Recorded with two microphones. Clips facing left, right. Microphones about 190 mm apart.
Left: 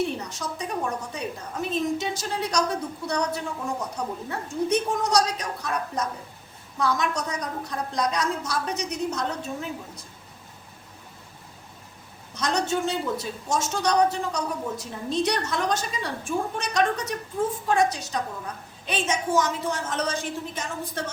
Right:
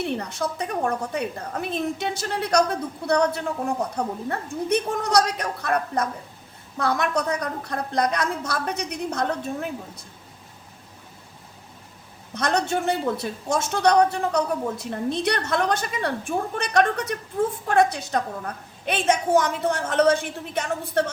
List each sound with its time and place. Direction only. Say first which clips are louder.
0.0 s a woman's voice: right 2 dB; 60° right (ahead or behind)
12.3 s a woman's voice: right 2 dB; 60° right (ahead or behind)